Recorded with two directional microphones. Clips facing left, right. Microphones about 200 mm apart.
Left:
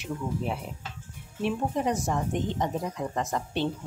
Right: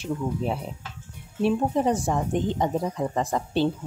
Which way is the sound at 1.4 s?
30° right (ahead or behind).